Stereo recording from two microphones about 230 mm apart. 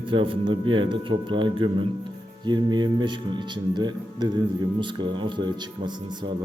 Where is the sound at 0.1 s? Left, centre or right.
Right.